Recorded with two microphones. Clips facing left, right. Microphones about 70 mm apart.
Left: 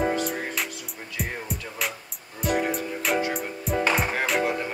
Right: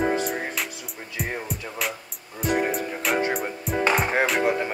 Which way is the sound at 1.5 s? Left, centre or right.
Centre.